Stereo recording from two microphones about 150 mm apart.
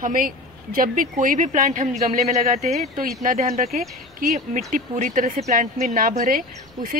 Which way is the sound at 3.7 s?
70° right (ahead or behind).